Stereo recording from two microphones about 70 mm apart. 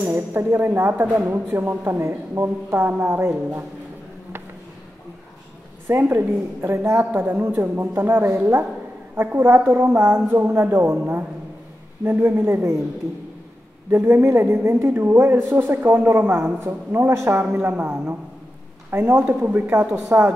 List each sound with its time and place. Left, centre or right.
0.1 s speech: right
5.9 s speech: right
7.1 s a woman's voice: right
12.0 s speech: right
13.8 s a woman's voice: right